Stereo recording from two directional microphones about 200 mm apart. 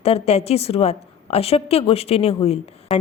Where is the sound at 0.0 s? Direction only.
30° left (ahead or behind).